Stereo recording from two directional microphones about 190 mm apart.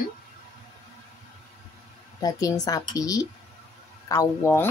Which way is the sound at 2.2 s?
20° left (ahead or behind).